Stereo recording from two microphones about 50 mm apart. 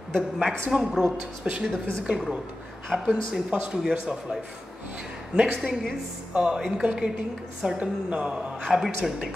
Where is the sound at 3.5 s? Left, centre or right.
Right.